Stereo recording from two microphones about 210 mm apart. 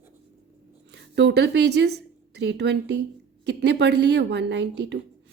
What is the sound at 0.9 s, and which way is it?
A woman's voice, 55° right (ahead or behind).